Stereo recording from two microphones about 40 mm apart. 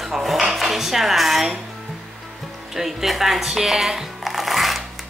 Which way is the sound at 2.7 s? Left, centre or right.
Centre.